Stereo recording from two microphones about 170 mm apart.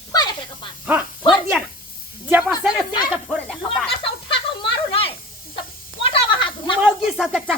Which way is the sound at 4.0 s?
30° left (ahead or behind).